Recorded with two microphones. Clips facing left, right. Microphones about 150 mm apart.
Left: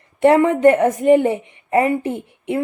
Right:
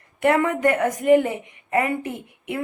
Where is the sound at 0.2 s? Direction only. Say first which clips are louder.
Left 6 dB; 30° left (ahead or behind).